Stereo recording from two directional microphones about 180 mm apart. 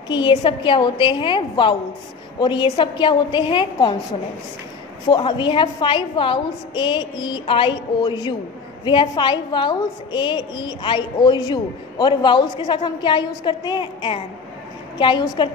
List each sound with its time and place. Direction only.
0.1 s a woman's voice: 25° left (ahead or behind)
5.1 s a woman's voice: 25° left (ahead or behind)